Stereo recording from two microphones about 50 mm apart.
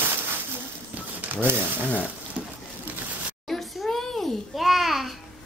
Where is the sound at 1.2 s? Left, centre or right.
Right.